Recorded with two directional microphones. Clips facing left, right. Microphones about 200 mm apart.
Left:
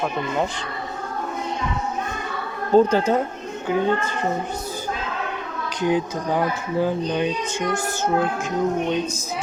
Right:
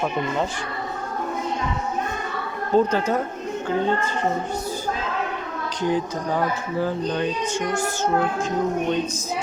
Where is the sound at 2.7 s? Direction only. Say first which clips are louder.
Left 3 dB; 30° left (ahead or behind).